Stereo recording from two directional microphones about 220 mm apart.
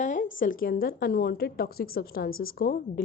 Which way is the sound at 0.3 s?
40° left (ahead or behind).